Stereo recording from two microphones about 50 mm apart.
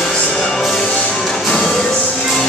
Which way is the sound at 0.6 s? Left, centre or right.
Centre.